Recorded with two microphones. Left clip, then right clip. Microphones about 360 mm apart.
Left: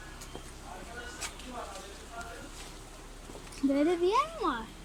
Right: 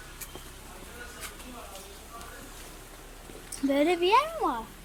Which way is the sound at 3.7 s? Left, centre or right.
Right.